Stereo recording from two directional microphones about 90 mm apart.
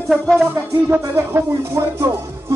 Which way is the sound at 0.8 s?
25° right (ahead or behind).